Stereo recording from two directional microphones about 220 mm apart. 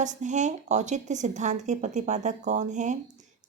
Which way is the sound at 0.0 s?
35° right (ahead or behind).